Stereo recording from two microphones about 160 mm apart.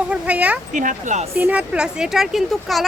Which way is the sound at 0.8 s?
50° right (ahead or behind).